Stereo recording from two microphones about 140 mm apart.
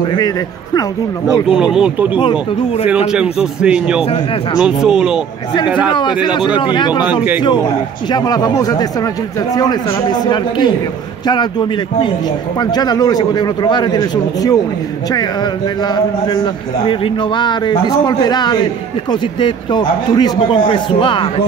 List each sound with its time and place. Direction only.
1.5 s a man's voice: 5° right (ahead or behind)
3.1 s a man's voice: 5° right (ahead or behind)
5.9 s a man's voice: 35° left (ahead or behind)
8.1 s speech: 30° left (ahead or behind)
10.2 s a man's voice: 30° left (ahead or behind)
12.5 s a man's voice: 30° left (ahead or behind)
16.8 s a man's voice: 35° left (ahead or behind)